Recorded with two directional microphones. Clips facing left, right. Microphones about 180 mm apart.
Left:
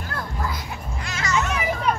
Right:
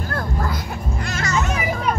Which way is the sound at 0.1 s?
50° right (ahead or behind).